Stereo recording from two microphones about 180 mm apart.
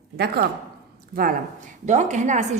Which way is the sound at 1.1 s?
55° right (ahead or behind).